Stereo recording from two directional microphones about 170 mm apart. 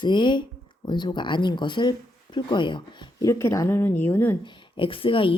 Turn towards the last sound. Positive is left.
turn(degrees=30)  # may be behind; listen again after turning